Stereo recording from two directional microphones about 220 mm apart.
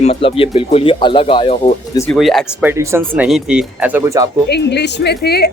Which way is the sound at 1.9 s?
10° left (ahead or behind).